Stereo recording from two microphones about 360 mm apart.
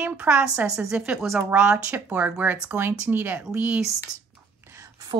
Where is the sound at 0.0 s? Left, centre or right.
Centre.